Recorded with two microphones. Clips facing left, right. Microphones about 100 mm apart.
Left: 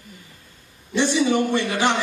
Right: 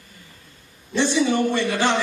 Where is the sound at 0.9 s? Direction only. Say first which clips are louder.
Even; 15° left (ahead or behind).